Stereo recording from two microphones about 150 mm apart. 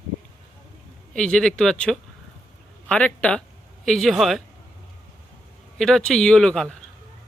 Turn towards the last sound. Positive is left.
turn(degrees=5)  # may be behind; listen again after turning